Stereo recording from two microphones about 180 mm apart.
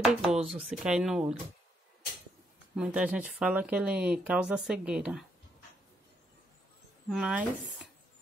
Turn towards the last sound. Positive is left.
turn(degrees=-5)  # may be behind; listen again after turning